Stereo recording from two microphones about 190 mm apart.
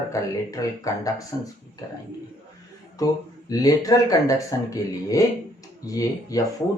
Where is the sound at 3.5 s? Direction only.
20° left (ahead or behind).